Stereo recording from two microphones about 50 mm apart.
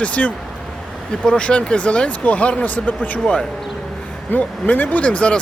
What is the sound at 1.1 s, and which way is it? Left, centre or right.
Speech, centre.